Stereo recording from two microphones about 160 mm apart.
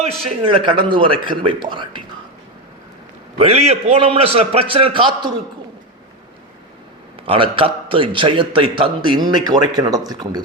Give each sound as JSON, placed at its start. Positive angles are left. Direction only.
{"t": 0.3, "sound": "a man's voice", "side_deg": -30}
{"t": 3.3, "sound": "a man's voice", "side_deg": -40}
{"t": 7.3, "sound": "a man's voice", "side_deg": -35}